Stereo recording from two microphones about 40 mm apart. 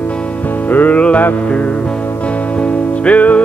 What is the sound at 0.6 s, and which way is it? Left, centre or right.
Music, left.